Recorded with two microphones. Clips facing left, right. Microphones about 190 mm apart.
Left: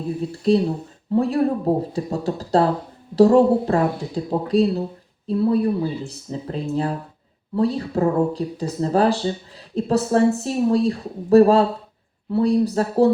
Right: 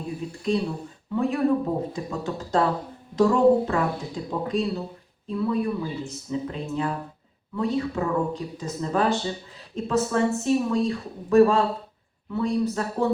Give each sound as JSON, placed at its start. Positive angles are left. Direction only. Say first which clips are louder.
{"t": 0.2, "sound": "speech", "louder": "left 7 dB", "side_deg": 35}